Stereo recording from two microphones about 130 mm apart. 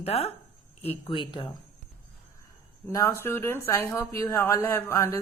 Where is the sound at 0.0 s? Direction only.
50° left (ahead or behind).